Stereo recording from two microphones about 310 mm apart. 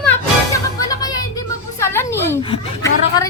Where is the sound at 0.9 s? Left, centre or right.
Centre.